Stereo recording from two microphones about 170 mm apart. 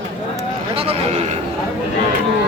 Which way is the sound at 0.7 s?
35° right (ahead or behind).